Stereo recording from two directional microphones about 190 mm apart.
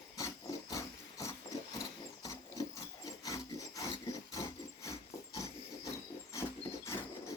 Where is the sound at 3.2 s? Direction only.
15° left (ahead or behind).